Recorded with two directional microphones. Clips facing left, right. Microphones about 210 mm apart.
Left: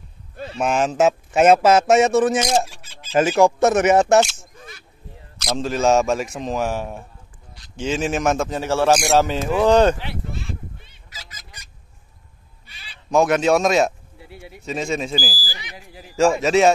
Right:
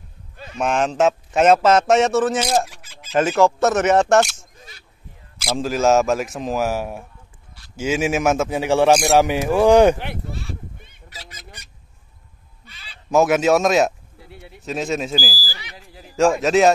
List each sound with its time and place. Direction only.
0.6 s a man's voice: 5° left (ahead or behind)
2.4 s speech: centre (ahead or behind)
2.7 s bird: 30° left (ahead or behind)
3.2 s a man's voice: 10° left (ahead or behind); by 9.9 s 10° right (ahead or behind)
10.8 s goose: 55° right (ahead or behind)
13.1 s speech: 5° right (ahead or behind)
15.3 s speech: 15° left (ahead or behind)
15.9 s speech: centre (ahead or behind)